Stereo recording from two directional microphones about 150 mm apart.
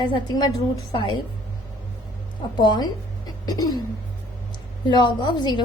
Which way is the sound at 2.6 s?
25° left (ahead or behind).